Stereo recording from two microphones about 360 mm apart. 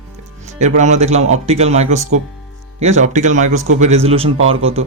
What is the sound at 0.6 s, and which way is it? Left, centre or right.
Speech, centre.